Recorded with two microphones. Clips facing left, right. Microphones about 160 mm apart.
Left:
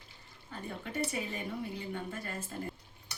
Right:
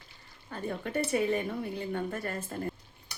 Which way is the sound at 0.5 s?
60° right (ahead or behind).